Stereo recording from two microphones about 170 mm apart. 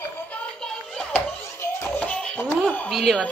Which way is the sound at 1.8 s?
10° left (ahead or behind).